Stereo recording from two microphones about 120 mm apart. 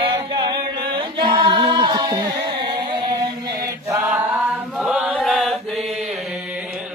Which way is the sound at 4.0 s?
15° right (ahead or behind).